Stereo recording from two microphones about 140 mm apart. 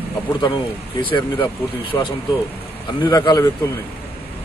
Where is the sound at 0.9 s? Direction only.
35° left (ahead or behind).